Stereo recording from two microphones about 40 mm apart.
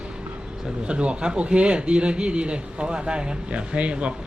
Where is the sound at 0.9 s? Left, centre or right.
Right.